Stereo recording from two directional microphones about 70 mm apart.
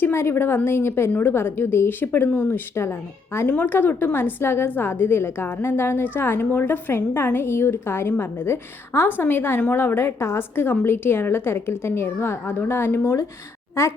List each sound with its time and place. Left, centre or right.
0.0 s a woman's voice: left
3.4 s a woman's voice: left